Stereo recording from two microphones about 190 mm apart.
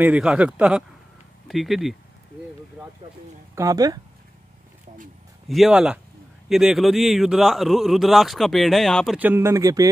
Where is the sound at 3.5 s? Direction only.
20° right (ahead or behind).